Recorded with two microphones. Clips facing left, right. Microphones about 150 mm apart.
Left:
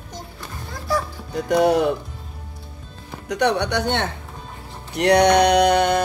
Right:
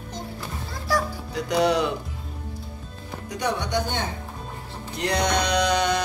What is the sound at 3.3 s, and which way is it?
Speech, 70° left (ahead or behind).